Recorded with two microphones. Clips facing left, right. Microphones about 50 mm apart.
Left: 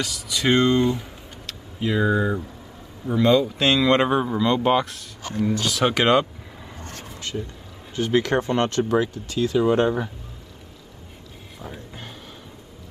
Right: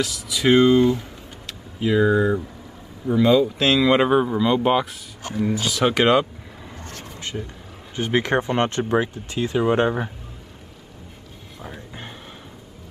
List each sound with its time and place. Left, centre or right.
0.0 s speech: centre
7.3 s speech: centre
11.6 s a sound: centre